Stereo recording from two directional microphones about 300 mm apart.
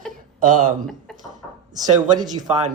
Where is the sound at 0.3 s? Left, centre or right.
Right.